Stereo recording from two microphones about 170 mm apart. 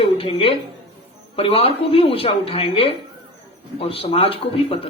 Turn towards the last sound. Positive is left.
turn(degrees=30)  # may be behind; listen again after turning